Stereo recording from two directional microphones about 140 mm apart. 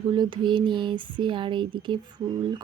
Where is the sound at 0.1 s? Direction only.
35° right (ahead or behind).